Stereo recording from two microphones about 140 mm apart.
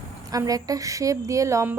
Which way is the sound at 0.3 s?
25° right (ahead or behind).